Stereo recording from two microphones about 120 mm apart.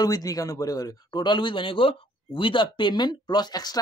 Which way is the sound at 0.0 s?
30° left (ahead or behind).